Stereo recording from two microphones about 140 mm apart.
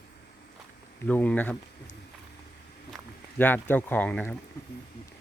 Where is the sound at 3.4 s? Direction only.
15° left (ahead or behind).